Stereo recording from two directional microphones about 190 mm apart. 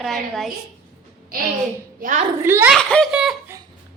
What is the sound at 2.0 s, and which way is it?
Speech, 40° right (ahead or behind).